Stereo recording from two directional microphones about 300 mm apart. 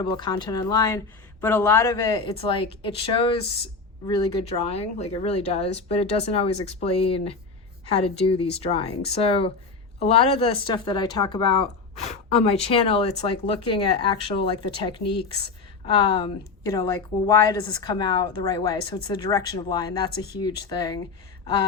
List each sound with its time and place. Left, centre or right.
0.0 s a woman's voice: centre